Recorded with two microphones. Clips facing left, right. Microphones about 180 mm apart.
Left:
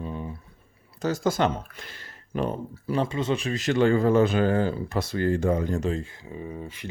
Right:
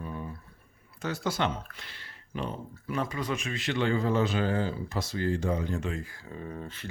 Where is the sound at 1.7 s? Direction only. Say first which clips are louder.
Left 5 dB; 45° left (ahead or behind).